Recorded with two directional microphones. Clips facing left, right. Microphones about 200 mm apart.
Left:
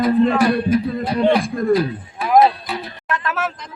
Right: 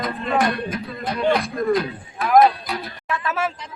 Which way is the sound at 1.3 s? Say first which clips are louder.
Left 3 dB; 30° left (ahead or behind).